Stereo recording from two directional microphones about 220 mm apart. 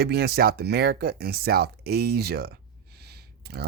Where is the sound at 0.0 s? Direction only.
45° right (ahead or behind).